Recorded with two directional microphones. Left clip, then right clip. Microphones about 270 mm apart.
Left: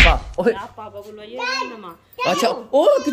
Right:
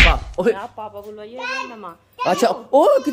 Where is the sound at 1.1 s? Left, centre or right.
Centre.